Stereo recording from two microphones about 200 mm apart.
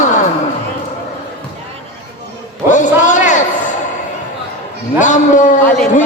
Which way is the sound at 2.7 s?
40° left (ahead or behind).